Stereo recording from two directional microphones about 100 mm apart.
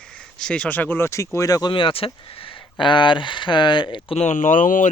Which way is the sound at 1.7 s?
60° left (ahead or behind).